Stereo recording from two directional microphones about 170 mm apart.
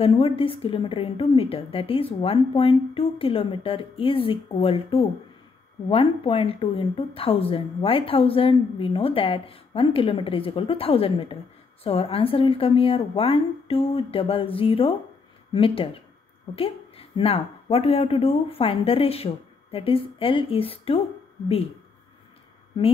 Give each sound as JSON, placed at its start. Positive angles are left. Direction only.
{"t": 0.0, "sound": "a woman's voice", "side_deg": 35}